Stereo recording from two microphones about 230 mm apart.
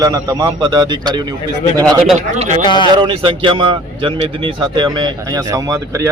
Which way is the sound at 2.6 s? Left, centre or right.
Centre.